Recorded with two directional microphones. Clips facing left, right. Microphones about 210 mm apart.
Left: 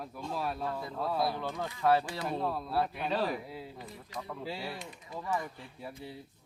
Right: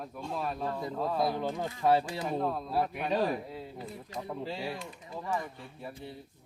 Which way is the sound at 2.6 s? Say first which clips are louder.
Right 1 dB; 15° right (ahead or behind).